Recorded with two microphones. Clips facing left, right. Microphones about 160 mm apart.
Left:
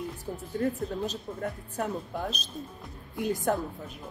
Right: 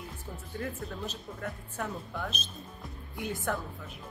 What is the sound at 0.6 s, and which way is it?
Speech, 35° left (ahead or behind).